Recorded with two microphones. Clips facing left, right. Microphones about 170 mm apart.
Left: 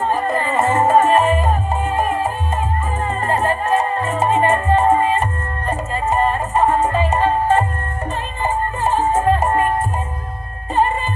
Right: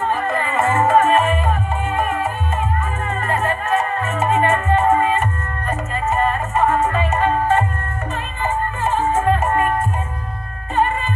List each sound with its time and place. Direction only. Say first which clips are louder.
0.1 s music: left 2 dB; 40° left (ahead or behind)